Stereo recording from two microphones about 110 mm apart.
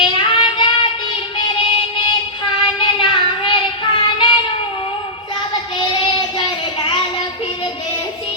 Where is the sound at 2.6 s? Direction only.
55° left (ahead or behind).